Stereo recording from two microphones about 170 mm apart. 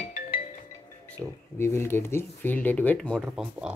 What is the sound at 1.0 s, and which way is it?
Speech, 10° left (ahead or behind).